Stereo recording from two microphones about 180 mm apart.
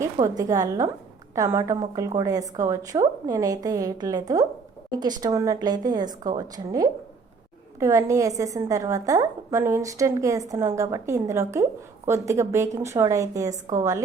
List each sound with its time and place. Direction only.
0.0 s a woman's voice: 20° right (ahead or behind)